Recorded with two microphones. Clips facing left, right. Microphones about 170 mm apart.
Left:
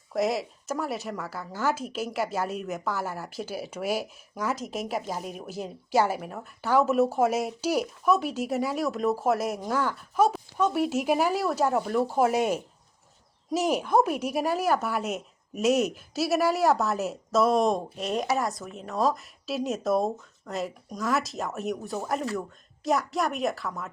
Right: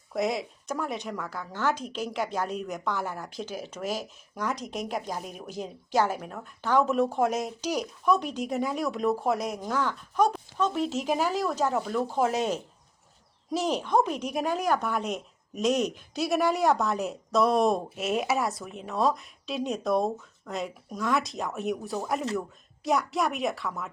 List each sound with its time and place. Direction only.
0.1 s speech: centre (ahead or behind)